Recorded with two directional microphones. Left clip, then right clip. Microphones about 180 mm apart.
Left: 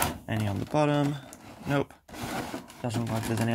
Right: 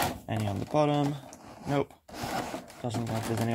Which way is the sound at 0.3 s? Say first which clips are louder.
Even; 20° left (ahead or behind).